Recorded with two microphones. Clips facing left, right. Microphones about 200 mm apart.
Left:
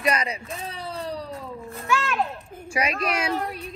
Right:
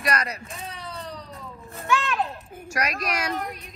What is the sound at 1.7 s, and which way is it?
Speech, centre (ahead or behind).